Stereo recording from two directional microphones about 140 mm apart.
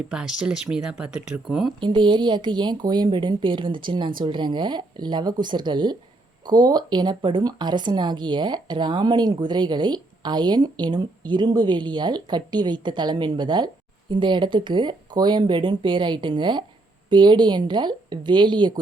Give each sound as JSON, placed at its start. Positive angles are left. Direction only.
{"t": 0.1, "sound": "speech", "side_deg": -5}
{"t": 1.8, "sound": "speech", "side_deg": -35}